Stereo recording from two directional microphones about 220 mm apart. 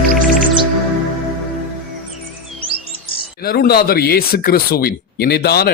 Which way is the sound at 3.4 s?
45° left (ahead or behind).